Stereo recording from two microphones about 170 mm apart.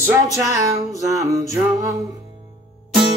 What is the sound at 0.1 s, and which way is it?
Music, 20° right (ahead or behind).